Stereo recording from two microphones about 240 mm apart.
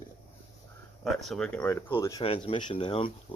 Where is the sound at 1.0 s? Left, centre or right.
Centre.